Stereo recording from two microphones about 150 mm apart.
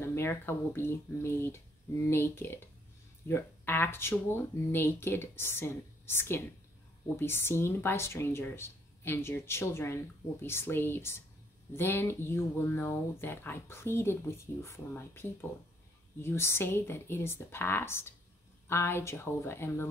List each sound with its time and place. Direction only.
0.0 s speech: 15° left (ahead or behind)